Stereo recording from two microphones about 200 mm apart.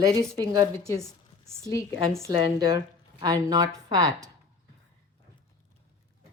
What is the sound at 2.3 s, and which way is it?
A woman's voice, 25° right (ahead or behind).